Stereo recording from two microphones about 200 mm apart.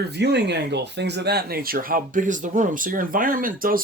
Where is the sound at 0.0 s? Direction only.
55° right (ahead or behind).